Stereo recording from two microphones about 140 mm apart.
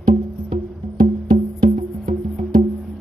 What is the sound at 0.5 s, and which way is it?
Music, 70° right (ahead or behind).